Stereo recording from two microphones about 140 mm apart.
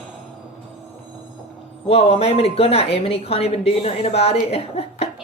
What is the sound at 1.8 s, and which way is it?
A woman's voice, 45° left (ahead or behind).